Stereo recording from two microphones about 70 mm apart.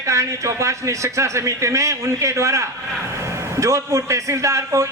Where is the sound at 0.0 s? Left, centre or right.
Right.